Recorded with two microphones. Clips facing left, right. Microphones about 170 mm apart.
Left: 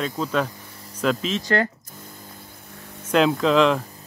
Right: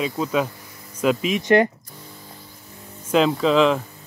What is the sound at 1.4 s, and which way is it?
Speech, 20° right (ahead or behind).